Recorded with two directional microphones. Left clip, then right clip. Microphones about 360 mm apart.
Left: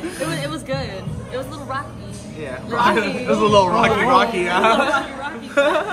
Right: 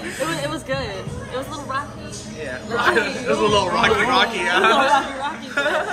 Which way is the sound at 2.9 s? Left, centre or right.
Left.